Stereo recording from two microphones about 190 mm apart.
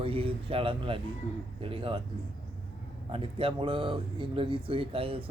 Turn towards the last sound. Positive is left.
turn(degrees=-30)  # may be behind; listen again after turning